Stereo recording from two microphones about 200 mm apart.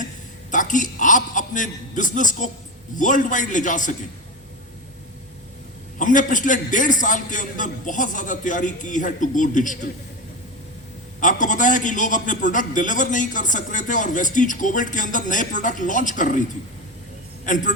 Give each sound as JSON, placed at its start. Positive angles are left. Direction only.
{"t": 0.5, "sound": "a man's voice", "side_deg": 40}
{"t": 6.0, "sound": "a man's voice", "side_deg": 40}
{"t": 11.2, "sound": "a man's voice", "side_deg": 40}
{"t": 17.4, "sound": "speech", "side_deg": 40}